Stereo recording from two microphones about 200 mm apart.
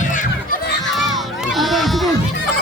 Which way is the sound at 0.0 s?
40° left (ahead or behind).